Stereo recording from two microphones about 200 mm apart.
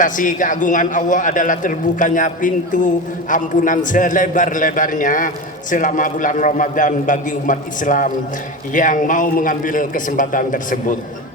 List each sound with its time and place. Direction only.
0.0 s a man's voice: 40° left (ahead or behind)